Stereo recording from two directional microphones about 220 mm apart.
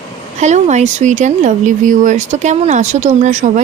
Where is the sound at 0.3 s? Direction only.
30° right (ahead or behind).